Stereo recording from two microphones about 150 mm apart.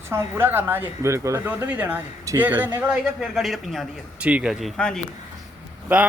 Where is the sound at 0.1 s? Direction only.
15° right (ahead or behind); by 4.9 s centre (ahead or behind).